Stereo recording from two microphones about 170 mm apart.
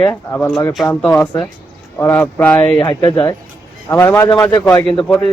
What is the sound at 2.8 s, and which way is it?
Speech, 20° left (ahead or behind).